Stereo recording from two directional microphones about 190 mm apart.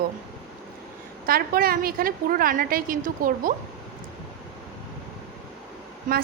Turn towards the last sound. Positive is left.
turn(degrees=-45)  # may be behind; listen again after turning